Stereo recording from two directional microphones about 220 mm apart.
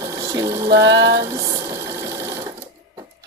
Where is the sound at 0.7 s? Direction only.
50° right (ahead or behind).